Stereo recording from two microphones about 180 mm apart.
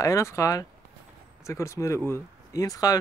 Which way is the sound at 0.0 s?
15° left (ahead or behind).